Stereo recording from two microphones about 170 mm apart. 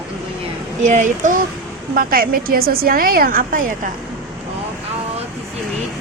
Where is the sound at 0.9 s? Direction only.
45° right (ahead or behind).